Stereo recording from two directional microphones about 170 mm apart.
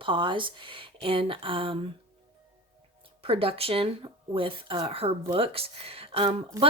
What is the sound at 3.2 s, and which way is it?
Speech, 35° right (ahead or behind).